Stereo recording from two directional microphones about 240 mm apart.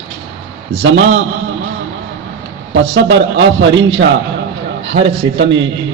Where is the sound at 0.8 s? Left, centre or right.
Right.